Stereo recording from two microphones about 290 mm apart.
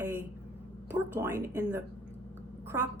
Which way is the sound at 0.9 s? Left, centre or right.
Centre.